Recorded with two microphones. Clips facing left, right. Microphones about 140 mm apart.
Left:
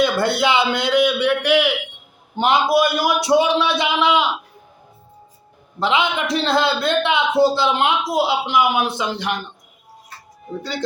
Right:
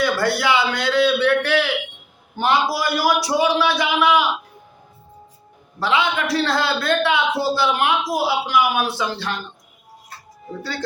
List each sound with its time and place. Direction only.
0.0 s a man's voice: 25° left (ahead or behind)
5.8 s speech: 20° left (ahead or behind)
10.6 s speech: 20° left (ahead or behind)